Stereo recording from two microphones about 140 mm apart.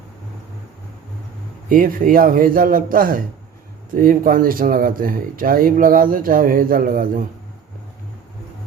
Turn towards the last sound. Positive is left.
turn(degrees=-80)